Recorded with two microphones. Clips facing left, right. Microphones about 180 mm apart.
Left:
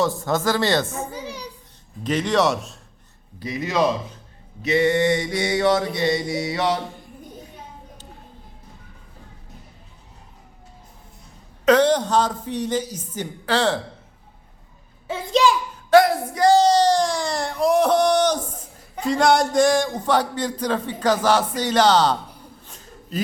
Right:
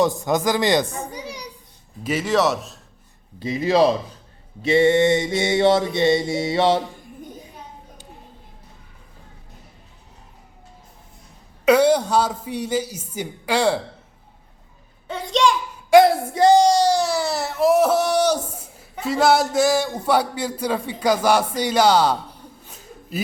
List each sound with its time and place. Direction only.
0.0 s speech: 15° right (ahead or behind)
1.1 s children playing: 15° right (ahead or behind)
2.0 s speech: 5° right (ahead or behind)
3.4 s mantra: 30° right (ahead or behind)
11.6 s speech: 10° right (ahead or behind)
15.0 s speech: 5° left (ahead or behind)
16.0 s mantra: 25° right (ahead or behind)
16.6 s speech: 10° right (ahead or behind)
22.6 s a sound: 10° right (ahead or behind)